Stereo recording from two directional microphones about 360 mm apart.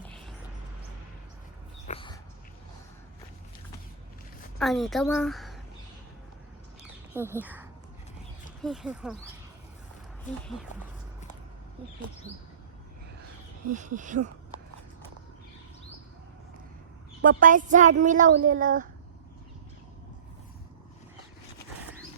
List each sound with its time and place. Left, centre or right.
0.0 s music: centre
1.9 s dog: centre
4.5 s a woman's voice: centre
7.1 s speech: centre
13.7 s speech: right
17.2 s speech: right